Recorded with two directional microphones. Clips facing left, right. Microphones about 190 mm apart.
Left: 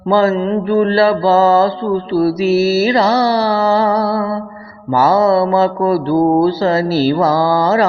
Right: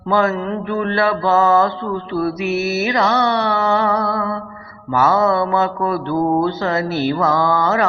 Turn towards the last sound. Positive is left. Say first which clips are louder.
# left 4 dB
turn(degrees=35)  # may be behind; listen again after turning